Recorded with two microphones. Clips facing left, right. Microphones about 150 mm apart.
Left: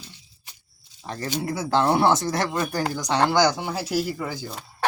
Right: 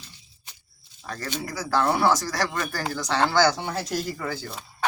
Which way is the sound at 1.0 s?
20° left (ahead or behind).